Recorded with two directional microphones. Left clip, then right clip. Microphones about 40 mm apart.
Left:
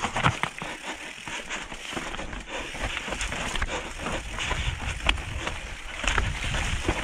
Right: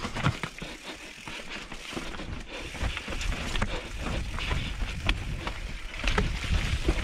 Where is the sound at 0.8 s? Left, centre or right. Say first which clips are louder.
Left 5 dB; centre.